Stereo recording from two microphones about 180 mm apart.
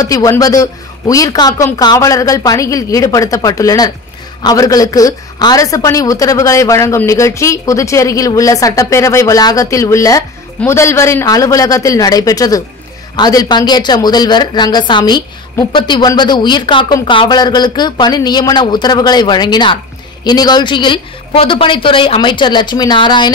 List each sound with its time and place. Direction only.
0.0 s a woman's voice: 20° left (ahead or behind)